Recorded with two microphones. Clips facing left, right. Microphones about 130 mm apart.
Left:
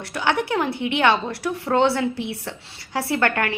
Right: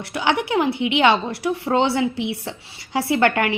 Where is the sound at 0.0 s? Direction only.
15° right (ahead or behind).